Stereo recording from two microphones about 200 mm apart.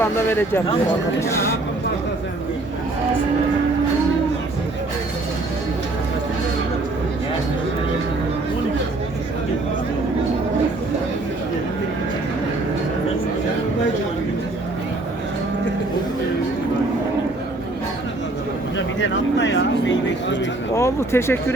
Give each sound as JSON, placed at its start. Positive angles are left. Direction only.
{"t": 0.0, "sound": "speech", "side_deg": 10}
{"t": 19.0, "sound": "speech", "side_deg": 65}
{"t": 20.7, "sound": "speech", "side_deg": 15}